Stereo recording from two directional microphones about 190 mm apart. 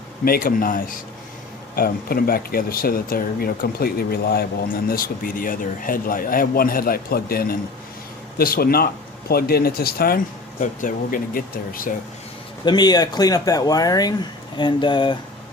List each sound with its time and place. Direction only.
0.3 s speech: 50° left (ahead or behind)
12.6 s speech: 20° left (ahead or behind)